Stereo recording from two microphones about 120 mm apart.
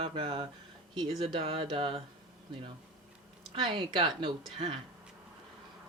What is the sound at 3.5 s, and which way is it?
Speech, 40° right (ahead or behind).